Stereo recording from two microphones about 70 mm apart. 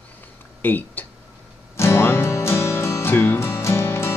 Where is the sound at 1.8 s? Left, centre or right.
Left.